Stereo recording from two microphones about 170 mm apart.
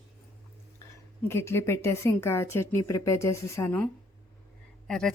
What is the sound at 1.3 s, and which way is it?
Speech, 15° left (ahead or behind).